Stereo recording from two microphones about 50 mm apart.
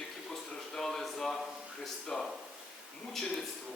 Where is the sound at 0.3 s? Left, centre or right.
Centre.